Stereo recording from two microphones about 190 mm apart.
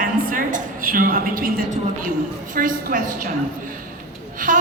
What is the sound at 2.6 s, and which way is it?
Speech, 45° right (ahead or behind).